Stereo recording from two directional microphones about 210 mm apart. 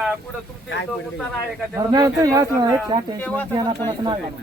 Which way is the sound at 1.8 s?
20° right (ahead or behind).